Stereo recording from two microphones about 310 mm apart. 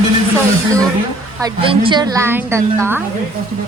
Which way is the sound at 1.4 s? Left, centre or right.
Centre.